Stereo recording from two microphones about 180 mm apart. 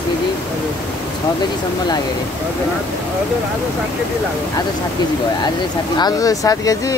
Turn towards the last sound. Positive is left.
turn(degrees=20)  # may be behind; listen again after turning